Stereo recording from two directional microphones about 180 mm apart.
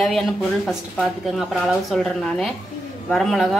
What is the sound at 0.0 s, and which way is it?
A woman's voice, centre (ahead or behind).